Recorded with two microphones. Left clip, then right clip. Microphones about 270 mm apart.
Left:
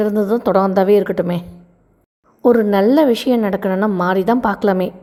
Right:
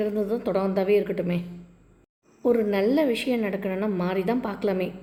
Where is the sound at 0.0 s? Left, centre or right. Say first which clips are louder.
Left 10 dB; left.